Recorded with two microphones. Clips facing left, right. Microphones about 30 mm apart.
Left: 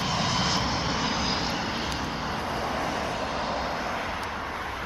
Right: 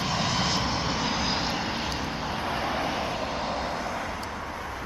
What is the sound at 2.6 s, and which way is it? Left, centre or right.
Vehicle, centre.